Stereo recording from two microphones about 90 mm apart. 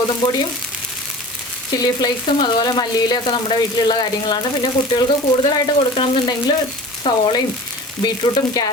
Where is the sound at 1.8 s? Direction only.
50° left (ahead or behind).